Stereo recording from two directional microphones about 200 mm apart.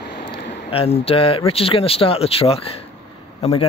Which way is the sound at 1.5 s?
30° left (ahead or behind).